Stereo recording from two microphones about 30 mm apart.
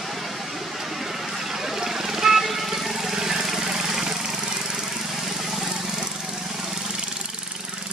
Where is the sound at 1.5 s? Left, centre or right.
Centre.